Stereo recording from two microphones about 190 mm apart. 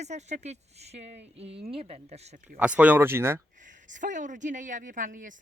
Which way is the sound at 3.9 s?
40° right (ahead or behind).